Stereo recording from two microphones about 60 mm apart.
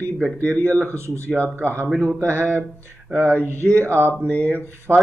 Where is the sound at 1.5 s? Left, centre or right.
Right.